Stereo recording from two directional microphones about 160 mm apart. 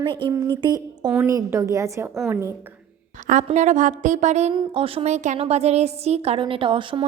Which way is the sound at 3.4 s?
45° right (ahead or behind).